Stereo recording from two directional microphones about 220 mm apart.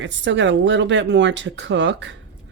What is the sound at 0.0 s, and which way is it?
Speech, 55° right (ahead or behind).